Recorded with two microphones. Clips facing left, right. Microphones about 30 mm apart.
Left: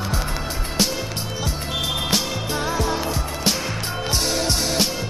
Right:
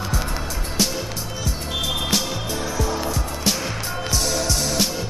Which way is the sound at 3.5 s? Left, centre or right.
Centre.